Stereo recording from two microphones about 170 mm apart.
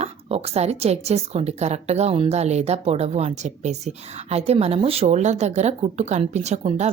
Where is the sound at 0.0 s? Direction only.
35° right (ahead or behind).